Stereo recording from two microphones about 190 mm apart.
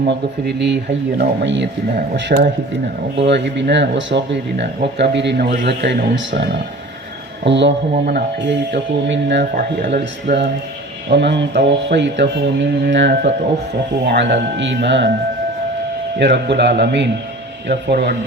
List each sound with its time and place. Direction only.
0.1 s speech: 65° right (ahead or behind)
9.4 s speech: 40° right (ahead or behind)
11.1 s speech: 65° right (ahead or behind)
16.1 s speech: 65° right (ahead or behind)